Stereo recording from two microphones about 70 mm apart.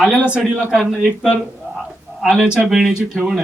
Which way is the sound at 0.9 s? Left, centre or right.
Centre.